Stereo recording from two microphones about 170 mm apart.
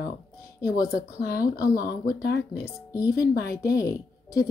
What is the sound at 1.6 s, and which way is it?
Speech, 60° left (ahead or behind).